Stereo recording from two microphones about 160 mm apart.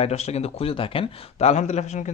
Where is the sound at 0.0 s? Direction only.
40° left (ahead or behind).